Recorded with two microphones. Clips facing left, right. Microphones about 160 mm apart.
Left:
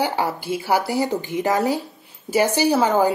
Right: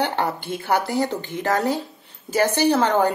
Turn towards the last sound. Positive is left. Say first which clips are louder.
# left 1 dB
turn(degrees=10)  # may be behind; listen again after turning